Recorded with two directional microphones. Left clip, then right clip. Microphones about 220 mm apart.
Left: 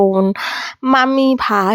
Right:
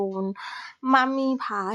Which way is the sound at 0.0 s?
35° left (ahead or behind).